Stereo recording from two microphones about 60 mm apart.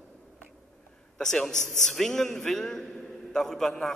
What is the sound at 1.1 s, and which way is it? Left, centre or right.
A man's voice, centre.